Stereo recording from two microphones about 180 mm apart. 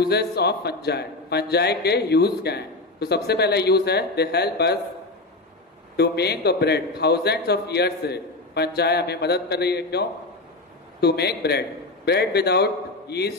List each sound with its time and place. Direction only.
0.0 s a man's voice: 65° left (ahead or behind)
5.9 s a man's voice: 65° left (ahead or behind)